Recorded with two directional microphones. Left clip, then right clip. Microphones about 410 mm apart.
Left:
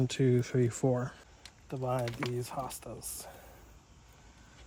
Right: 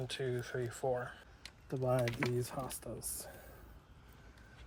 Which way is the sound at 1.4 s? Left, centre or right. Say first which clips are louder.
Left 1 dB; centre.